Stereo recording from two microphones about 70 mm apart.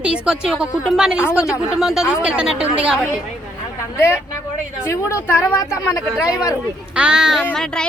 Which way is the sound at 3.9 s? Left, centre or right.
Left.